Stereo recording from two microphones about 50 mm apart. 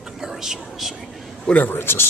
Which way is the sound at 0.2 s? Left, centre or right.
Centre.